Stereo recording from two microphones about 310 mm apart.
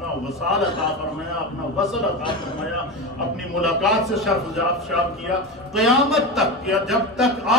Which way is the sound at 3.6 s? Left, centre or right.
Centre.